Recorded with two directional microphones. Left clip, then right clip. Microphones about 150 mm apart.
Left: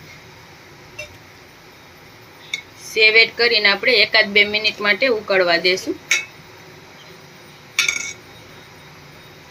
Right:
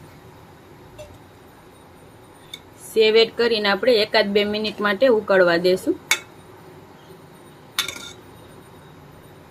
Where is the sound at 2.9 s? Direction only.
75° right (ahead or behind).